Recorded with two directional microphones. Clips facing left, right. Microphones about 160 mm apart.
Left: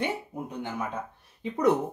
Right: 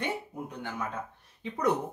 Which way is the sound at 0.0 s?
15° left (ahead or behind).